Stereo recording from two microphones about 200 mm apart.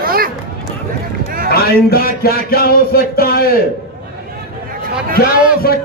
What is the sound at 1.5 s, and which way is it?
Music, 50° left (ahead or behind).